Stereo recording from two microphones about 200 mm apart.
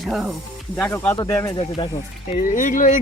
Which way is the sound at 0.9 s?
15° left (ahead or behind).